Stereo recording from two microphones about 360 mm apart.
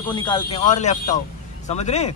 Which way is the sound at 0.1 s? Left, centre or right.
Centre.